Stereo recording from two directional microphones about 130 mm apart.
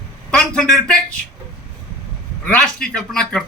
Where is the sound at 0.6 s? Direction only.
5° left (ahead or behind).